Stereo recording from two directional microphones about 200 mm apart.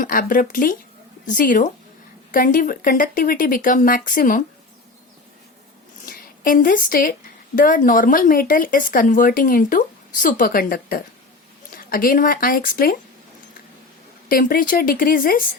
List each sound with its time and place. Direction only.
0.0 s a woman's voice: 45° left (ahead or behind)
6.1 s a woman's voice: 45° left (ahead or behind)
14.3 s a woman's voice: 45° left (ahead or behind)